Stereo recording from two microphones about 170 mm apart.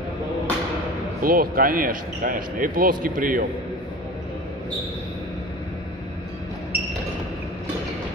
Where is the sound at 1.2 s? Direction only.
60° right (ahead or behind).